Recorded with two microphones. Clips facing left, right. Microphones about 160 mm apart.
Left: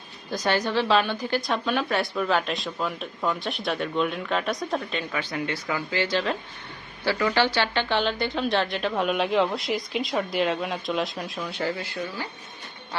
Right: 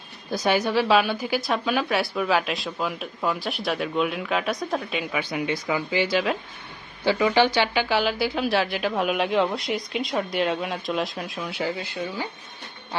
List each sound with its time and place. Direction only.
0.3 s a woman's voice: 10° right (ahead or behind)
11.6 s speech: 15° right (ahead or behind)